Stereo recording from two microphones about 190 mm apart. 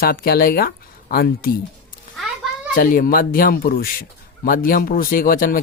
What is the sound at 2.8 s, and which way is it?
Speech, 50° left (ahead or behind).